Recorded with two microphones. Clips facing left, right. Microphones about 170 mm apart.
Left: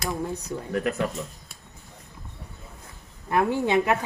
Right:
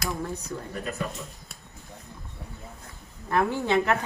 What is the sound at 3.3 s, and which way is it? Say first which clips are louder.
Speech: left 2 dB; 15° left (ahead or behind).